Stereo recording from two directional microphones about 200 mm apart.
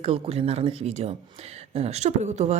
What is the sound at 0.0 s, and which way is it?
Speech, 30° right (ahead or behind).